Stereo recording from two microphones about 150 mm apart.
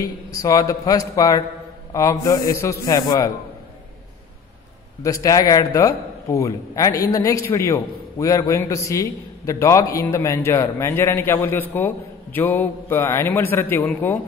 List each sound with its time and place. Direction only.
0.0 s a man's voice: 20° left (ahead or behind)
5.0 s a man's voice: 20° left (ahead or behind)